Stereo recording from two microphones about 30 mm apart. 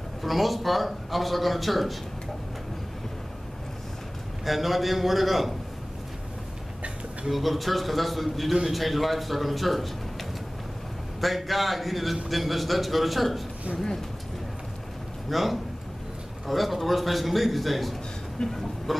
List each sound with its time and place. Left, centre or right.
0.2 s a man's voice: centre
4.5 s a man's voice: centre
7.2 s a man's voice: centre
11.1 s a man's voice: centre
15.2 s a man's voice: centre
18.4 s speech: centre
18.9 s a man's voice: centre